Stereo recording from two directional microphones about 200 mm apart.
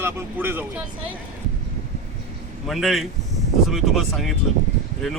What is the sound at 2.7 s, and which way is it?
Speech, centre (ahead or behind).